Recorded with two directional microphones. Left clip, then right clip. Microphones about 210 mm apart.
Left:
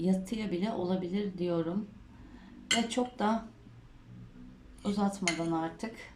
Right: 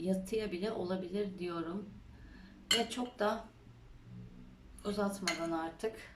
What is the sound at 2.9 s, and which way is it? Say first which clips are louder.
Speech: left 4 dB; 30° left (ahead or behind).